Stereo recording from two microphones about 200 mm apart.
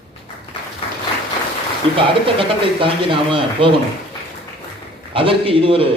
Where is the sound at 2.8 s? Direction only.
25° right (ahead or behind).